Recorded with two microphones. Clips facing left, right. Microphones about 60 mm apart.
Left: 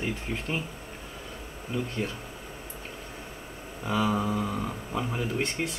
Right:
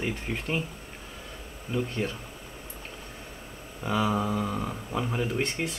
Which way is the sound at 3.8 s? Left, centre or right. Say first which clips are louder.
Even; centre.